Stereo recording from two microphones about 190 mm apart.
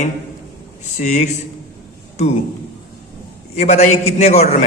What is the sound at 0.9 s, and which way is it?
Speech, 35° left (ahead or behind).